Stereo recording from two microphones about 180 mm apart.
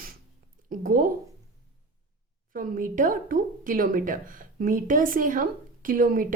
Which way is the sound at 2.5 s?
50° right (ahead or behind).